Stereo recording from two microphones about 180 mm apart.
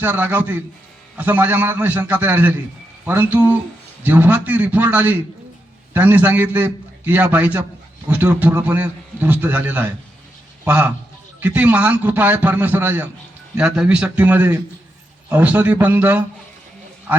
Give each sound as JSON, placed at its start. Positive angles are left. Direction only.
{"t": 0.0, "sound": "a man's voice", "side_deg": -10}